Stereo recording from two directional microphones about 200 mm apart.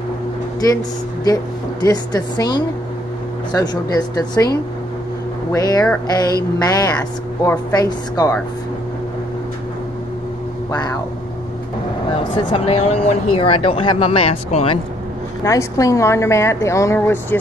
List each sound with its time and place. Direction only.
1.2 s speech: 20° left (ahead or behind)
5.5 s a woman's voice: 15° left (ahead or behind)
12.4 s speech: 30° left (ahead or behind)
15.4 s a woman's voice: 15° left (ahead or behind)